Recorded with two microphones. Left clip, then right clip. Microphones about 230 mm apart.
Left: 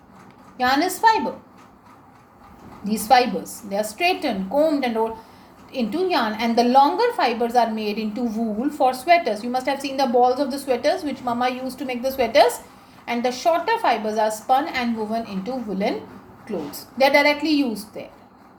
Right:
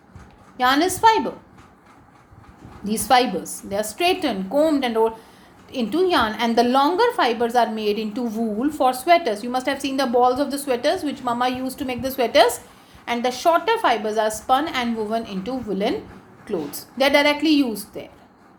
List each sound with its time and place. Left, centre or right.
0.5 s a woman's voice: right
2.8 s a woman's voice: right